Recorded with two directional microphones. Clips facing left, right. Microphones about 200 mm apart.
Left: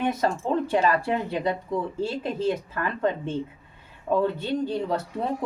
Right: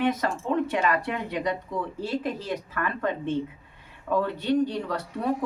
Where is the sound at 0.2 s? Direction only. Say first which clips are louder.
Left 2 dB; 30° left (ahead or behind).